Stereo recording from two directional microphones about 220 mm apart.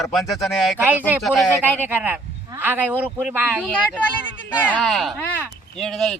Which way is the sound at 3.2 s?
5° left (ahead or behind).